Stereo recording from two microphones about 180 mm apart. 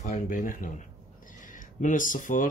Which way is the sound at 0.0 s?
45° left (ahead or behind).